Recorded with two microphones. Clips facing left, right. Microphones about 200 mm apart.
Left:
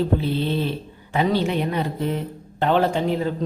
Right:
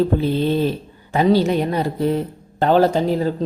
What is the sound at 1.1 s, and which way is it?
Speech, 40° right (ahead or behind).